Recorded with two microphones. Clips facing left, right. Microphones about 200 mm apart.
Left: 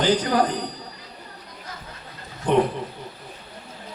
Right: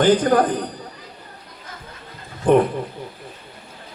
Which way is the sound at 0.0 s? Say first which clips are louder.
Right 5 dB; 50° right (ahead or behind).